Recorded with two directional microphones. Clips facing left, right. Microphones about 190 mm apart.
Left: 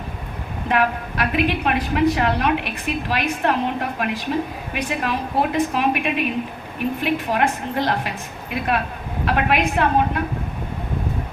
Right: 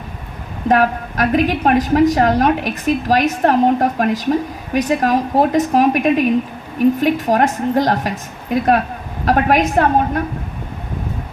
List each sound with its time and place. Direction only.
0.7 s a woman's voice: 40° right (ahead or behind)